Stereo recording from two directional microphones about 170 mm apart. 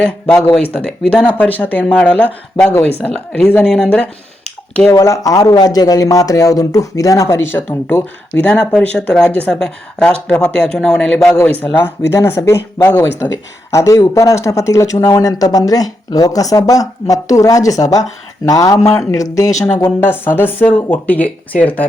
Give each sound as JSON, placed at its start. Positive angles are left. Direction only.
{"t": 0.0, "sound": "a man's voice", "side_deg": 5}
{"t": 4.9, "sound": "a man's voice", "side_deg": 20}